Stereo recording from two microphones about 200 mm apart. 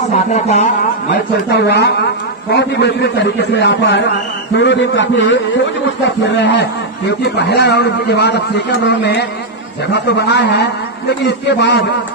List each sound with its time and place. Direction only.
0.1 s speech: 35° left (ahead or behind)
1.5 s a man's voice: 55° left (ahead or behind)